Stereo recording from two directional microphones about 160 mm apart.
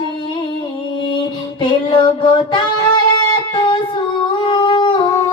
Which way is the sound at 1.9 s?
25° left (ahead or behind).